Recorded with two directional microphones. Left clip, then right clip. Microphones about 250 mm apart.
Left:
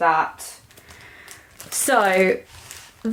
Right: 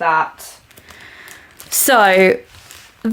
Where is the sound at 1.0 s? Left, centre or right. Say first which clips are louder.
Right 7 dB; right.